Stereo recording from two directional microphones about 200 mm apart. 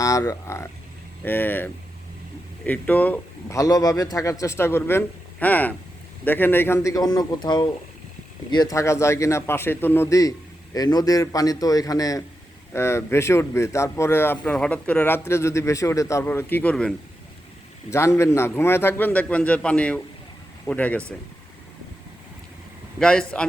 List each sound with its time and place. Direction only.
0.0 s speech: 15° left (ahead or behind)
18.2 s speech: 15° left (ahead or behind)
23.0 s a man's voice: 5° left (ahead or behind)